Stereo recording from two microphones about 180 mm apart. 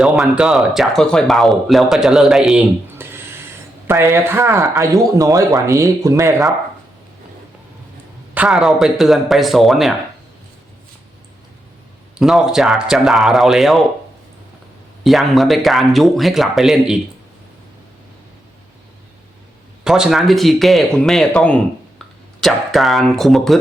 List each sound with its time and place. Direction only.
0.0 s speech: centre (ahead or behind)
8.4 s speech: centre (ahead or behind)
12.1 s speech: centre (ahead or behind)
15.0 s speech: centre (ahead or behind)
19.8 s speech: 5° right (ahead or behind)